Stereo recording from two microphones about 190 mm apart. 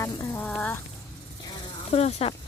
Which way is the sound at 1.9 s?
35° left (ahead or behind).